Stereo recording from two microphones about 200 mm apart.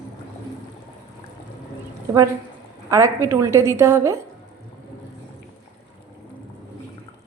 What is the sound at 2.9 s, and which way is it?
A woman's voice, 15° right (ahead or behind).